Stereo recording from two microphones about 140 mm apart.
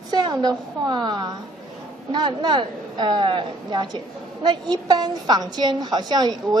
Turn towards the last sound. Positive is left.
turn(degrees=-30)  # may be behind; listen again after turning